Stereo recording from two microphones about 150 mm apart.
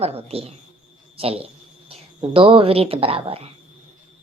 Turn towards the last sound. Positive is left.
turn(degrees=-40)  # may be behind; listen again after turning